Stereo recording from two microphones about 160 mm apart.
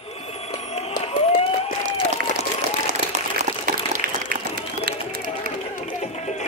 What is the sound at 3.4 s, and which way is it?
Liquid, 65° right (ahead or behind).